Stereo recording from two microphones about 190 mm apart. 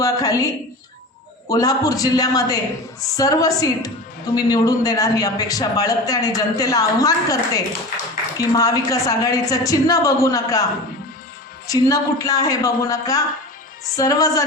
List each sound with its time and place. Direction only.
0.0 s a man's voice: 20° left (ahead or behind)
11.7 s a woman's voice: 20° left (ahead or behind)